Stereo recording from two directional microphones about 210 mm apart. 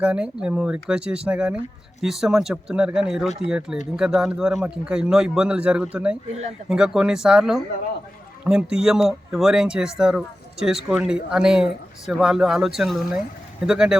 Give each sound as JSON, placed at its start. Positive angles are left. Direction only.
{"t": 0.0, "sound": "speech", "side_deg": -5}